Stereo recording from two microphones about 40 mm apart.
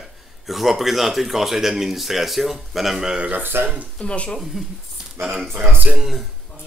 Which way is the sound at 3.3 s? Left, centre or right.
Right.